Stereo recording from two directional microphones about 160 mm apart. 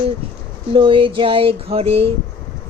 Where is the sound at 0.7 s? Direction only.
30° right (ahead or behind).